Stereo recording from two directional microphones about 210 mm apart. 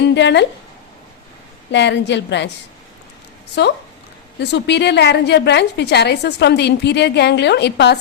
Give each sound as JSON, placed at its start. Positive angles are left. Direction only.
{"t": 0.1, "sound": "a woman's voice", "side_deg": 55}
{"t": 1.7, "sound": "a woman's voice", "side_deg": 55}
{"t": 3.6, "sound": "a woman's voice", "side_deg": 55}